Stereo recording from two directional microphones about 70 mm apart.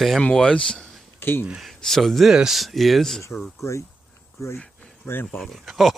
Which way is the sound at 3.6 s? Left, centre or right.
Left.